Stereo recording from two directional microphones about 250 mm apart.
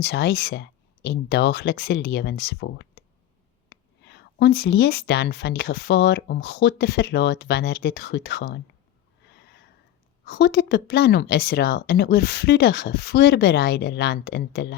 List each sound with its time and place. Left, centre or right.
0.0 s a woman's voice: left
9.3 s snort: left
10.2 s a woman's voice: left